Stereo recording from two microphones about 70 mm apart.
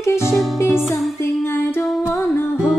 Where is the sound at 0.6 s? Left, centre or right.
Centre.